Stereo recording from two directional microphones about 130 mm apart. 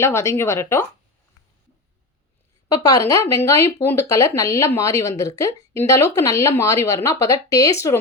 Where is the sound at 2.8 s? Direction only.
25° left (ahead or behind).